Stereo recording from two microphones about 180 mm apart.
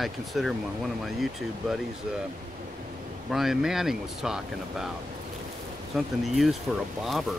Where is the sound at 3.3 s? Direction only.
Centre (ahead or behind).